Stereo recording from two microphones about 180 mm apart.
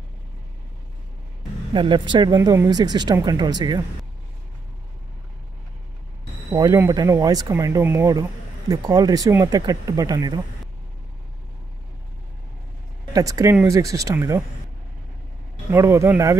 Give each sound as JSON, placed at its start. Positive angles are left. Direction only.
{"t": 1.7, "sound": "speech", "side_deg": -25}
{"t": 6.5, "sound": "speech", "side_deg": -20}
{"t": 13.1, "sound": "speech", "side_deg": -20}
{"t": 15.7, "sound": "speech", "side_deg": -15}